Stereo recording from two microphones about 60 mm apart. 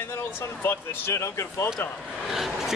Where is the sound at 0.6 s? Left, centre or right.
Left.